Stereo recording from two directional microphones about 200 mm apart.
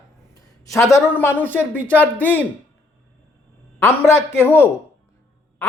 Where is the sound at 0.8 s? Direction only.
15° left (ahead or behind).